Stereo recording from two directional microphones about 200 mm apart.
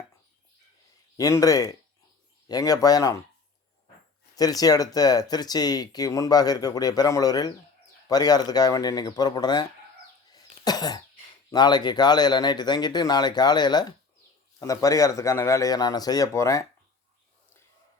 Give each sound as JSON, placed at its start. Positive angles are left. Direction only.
{"t": 1.1, "sound": "speech", "side_deg": 15}
{"t": 4.4, "sound": "speech", "side_deg": 20}
{"t": 10.3, "sound": "cough", "side_deg": 20}
{"t": 11.5, "sound": "speech", "side_deg": 20}